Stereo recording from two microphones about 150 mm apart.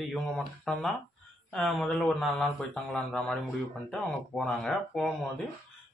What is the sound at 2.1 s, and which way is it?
Speech, 5° left (ahead or behind).